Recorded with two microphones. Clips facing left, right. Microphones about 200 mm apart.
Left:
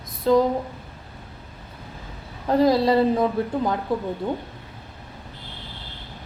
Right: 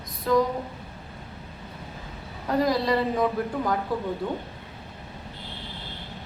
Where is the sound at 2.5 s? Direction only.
30° left (ahead or behind).